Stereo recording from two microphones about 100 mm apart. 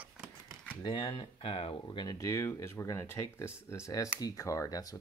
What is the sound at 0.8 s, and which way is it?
Speech, 50° left (ahead or behind).